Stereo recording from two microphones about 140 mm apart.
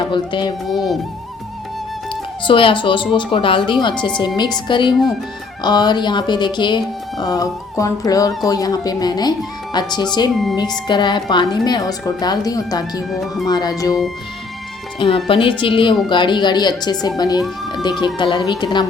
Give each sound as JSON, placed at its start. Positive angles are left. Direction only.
{"t": 0.1, "sound": "music", "side_deg": 35}
{"t": 0.7, "sound": "speech", "side_deg": 0}
{"t": 2.4, "sound": "music", "side_deg": 40}
{"t": 7.2, "sound": "a woman's voice", "side_deg": 25}
{"t": 9.7, "sound": "music", "side_deg": 30}
{"t": 10.5, "sound": "a woman's voice", "side_deg": 30}
{"t": 13.1, "sound": "speech", "side_deg": 0}
{"t": 13.5, "sound": "a woman's voice", "side_deg": 30}
{"t": 14.9, "sound": "music", "side_deg": 40}
{"t": 17.2, "sound": "a woman's voice", "side_deg": 30}
{"t": 18.0, "sound": "music", "side_deg": 35}